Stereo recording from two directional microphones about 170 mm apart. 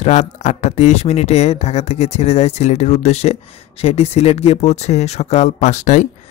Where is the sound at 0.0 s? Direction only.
45° left (ahead or behind).